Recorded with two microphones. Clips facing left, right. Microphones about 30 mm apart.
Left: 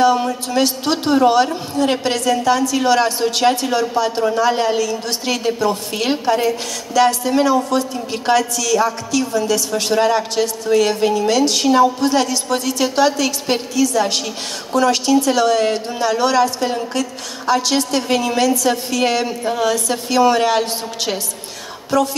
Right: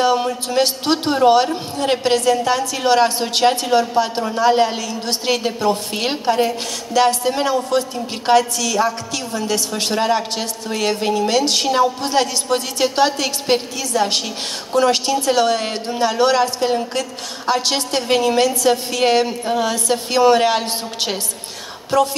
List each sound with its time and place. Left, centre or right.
0.0 s a man's voice: right